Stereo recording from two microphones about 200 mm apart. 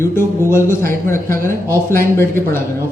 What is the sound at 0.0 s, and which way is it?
Speech, 10° left (ahead or behind).